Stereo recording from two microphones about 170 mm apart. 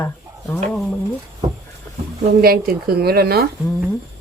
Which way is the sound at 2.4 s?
65° right (ahead or behind).